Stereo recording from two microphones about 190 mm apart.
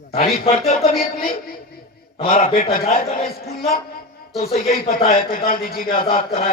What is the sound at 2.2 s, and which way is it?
A man's voice, 45° left (ahead or behind).